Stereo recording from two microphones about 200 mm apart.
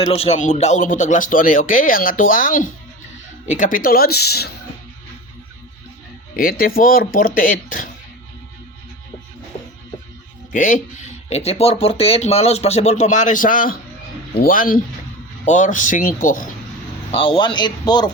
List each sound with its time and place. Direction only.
0.0 s speech: 30° left (ahead or behind); by 4.5 s 55° left (ahead or behind)
6.3 s speech: 45° left (ahead or behind)
10.5 s speech: 40° left (ahead or behind)
17.1 s speech: 25° left (ahead or behind)